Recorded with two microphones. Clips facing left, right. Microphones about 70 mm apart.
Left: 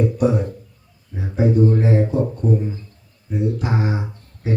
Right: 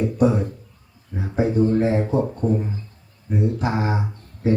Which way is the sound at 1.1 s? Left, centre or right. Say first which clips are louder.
Left 2 dB; right.